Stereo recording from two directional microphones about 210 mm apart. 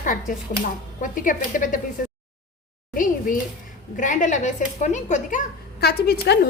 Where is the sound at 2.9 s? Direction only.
40° left (ahead or behind).